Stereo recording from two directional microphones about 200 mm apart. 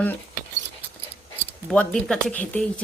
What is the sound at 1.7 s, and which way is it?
Speech, 5° left (ahead or behind).